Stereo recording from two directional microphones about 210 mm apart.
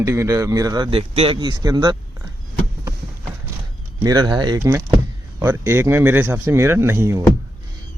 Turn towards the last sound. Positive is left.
turn(degrees=-15)  # may be behind; listen again after turning